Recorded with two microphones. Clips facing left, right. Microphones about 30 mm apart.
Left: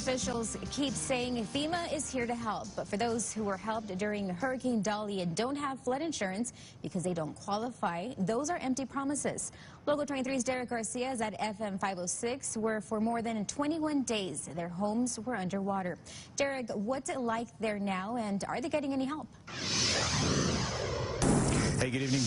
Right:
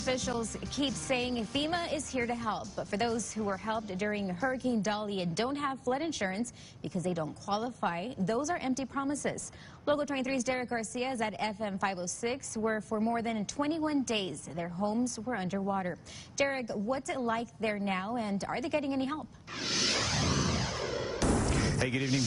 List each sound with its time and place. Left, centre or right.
0.0 s a woman's voice: centre
12.6 s a woman's voice: centre
13.0 s a woman's voice: right
15.4 s a woman's voice: centre
19.5 s music: centre
21.6 s music: centre